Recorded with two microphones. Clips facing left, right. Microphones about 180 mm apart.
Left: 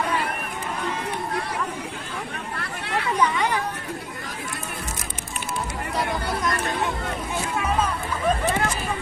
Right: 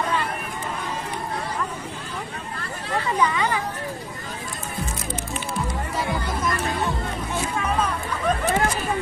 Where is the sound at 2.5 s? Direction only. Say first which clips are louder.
Right 1 dB; 70° left (ahead or behind).